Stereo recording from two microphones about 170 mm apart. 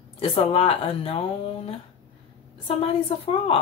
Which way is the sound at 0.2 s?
35° left (ahead or behind).